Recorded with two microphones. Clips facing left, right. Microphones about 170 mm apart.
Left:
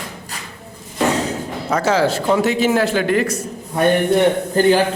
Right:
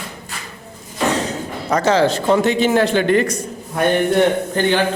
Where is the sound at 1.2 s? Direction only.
5° left (ahead or behind).